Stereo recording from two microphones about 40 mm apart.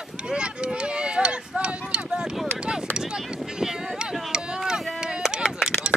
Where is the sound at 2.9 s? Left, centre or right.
Centre.